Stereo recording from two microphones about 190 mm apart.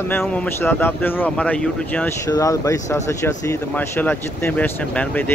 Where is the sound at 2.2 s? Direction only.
15° left (ahead or behind).